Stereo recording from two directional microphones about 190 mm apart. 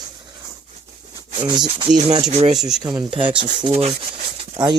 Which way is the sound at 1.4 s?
20° right (ahead or behind).